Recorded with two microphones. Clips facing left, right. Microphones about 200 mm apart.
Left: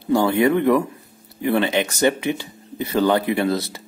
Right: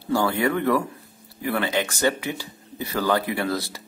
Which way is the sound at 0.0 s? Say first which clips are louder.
Left 5 dB; 20° left (ahead or behind).